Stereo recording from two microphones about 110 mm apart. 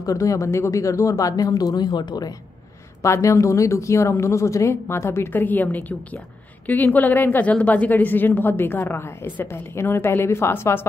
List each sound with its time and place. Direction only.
0.0 s speech: 30° left (ahead or behind)
3.0 s a woman's voice: 30° left (ahead or behind)